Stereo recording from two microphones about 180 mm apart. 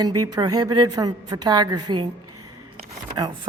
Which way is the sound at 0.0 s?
20° right (ahead or behind).